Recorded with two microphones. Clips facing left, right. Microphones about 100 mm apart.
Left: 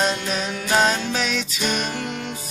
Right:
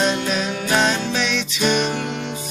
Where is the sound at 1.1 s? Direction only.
40° left (ahead or behind).